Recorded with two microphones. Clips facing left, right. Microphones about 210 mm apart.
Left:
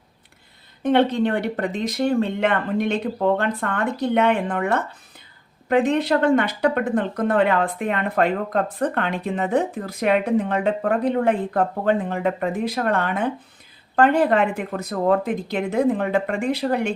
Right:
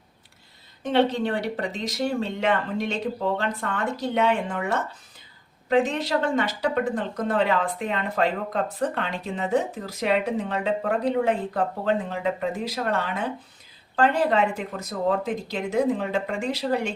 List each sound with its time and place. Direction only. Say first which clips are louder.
0.8 s speech: left 4 dB; 55° left (ahead or behind)